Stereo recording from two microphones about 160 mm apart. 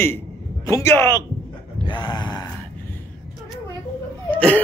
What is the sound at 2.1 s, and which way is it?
Groan, 25° left (ahead or behind).